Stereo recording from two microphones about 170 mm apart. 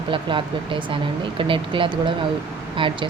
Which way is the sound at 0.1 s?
30° right (ahead or behind).